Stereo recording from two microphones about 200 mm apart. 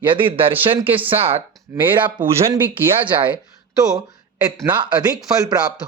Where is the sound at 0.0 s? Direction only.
25° right (ahead or behind).